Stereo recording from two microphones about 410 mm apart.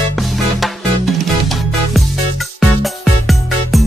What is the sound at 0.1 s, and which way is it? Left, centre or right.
Music, centre.